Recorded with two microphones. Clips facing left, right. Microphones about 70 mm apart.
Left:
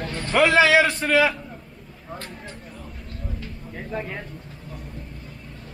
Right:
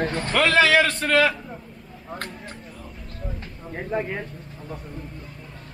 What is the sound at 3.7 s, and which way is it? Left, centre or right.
Speech, centre.